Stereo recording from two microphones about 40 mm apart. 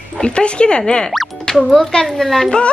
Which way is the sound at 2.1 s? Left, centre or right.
Centre.